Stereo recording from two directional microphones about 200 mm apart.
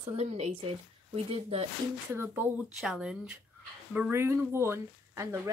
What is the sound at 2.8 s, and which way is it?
Speech, 5° right (ahead or behind).